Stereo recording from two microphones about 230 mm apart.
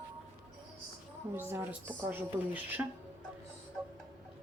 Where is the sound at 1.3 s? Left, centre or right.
Centre.